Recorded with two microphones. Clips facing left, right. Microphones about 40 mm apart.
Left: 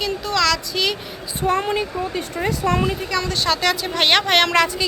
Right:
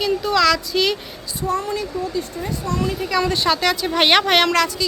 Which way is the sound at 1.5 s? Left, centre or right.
Left.